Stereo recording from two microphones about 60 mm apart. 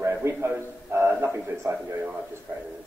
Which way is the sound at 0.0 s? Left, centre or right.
Right.